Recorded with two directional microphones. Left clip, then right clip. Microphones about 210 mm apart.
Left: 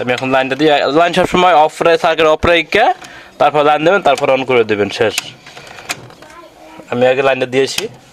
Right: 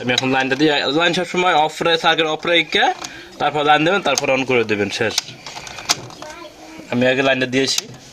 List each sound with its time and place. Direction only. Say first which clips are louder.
0.0 s speech: left 4 dB; 50° left (ahead or behind)
6.9 s speech: left 5 dB; 50° left (ahead or behind)